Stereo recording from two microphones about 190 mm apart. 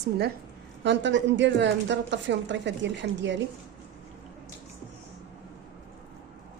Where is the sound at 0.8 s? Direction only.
70° right (ahead or behind).